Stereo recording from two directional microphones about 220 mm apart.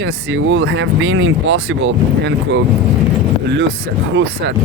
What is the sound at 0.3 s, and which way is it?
Speech, 60° right (ahead or behind).